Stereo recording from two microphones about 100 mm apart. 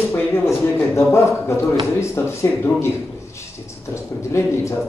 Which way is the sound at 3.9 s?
30° left (ahead or behind).